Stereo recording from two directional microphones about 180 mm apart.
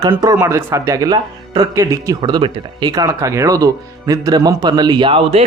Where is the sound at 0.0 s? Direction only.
20° right (ahead or behind).